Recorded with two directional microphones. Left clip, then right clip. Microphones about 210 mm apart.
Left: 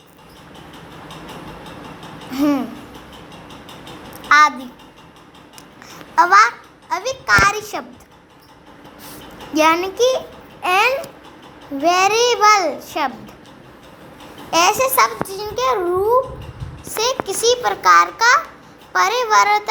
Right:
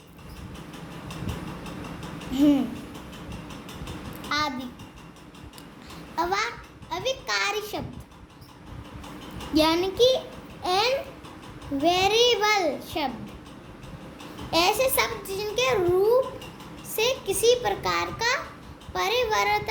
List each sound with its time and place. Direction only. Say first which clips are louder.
2.3 s speech: left 3 dB; 10° right (ahead or behind)
4.3 s a sound: left 16 dB; 5° right (ahead or behind)
6.1 s a child's voice: left 15 dB; 5° right (ahead or behind)
6.9 s a sound: left 11 dB; centre (ahead or behind)
9.6 s a child's voice: left 6 dB; 15° right (ahead or behind)
14.7 s a child's voice: left 8 dB; 10° right (ahead or behind)